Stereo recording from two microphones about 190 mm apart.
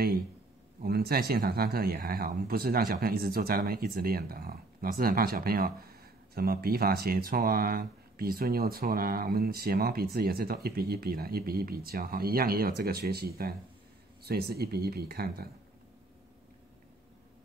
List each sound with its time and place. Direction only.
0.8 s speech: 55° right (ahead or behind)